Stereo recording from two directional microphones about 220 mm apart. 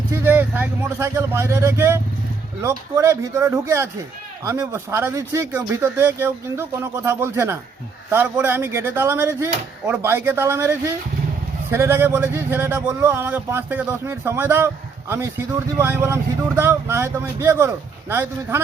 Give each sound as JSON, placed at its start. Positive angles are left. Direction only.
{"t": 0.1, "sound": "speech", "side_deg": -10}